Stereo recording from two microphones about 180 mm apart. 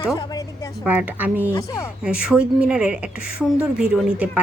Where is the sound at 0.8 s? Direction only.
10° right (ahead or behind).